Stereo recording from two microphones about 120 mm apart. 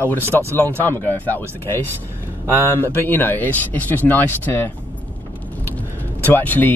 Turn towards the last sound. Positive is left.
turn(degrees=15)  # may be behind; listen again after turning